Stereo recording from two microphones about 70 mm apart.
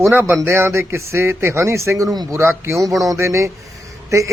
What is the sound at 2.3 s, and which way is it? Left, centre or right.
A man's voice, right.